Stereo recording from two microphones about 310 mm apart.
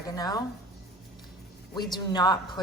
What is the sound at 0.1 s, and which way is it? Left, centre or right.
Speech, centre.